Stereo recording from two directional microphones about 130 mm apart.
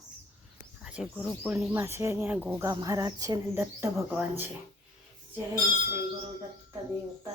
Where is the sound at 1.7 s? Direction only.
20° right (ahead or behind).